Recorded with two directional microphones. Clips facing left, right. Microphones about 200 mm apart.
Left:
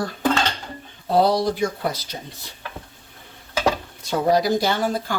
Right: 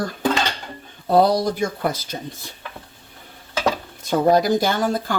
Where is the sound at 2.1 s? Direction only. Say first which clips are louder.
Right 4 dB; 50° right (ahead or behind).